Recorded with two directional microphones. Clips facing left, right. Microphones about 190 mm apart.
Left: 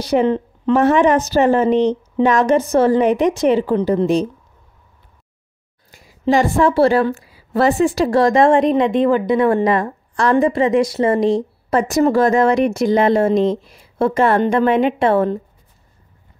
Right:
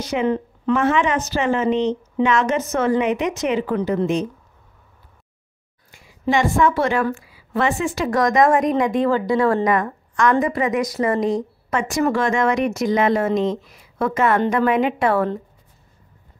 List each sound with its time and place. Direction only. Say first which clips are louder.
0.0 s speech: left 5 dB; 35° left (ahead or behind)
5.9 s a woman's voice: left 5 dB; 40° left (ahead or behind)